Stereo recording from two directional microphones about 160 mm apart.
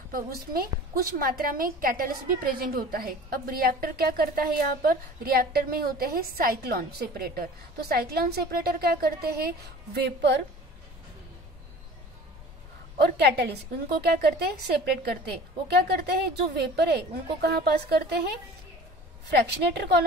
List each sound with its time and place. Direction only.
0.1 s a woman's voice: 65° right (ahead or behind)
9.9 s a woman's voice: 90° right
13.0 s a woman's voice: 90° right
19.3 s a woman's voice: 90° right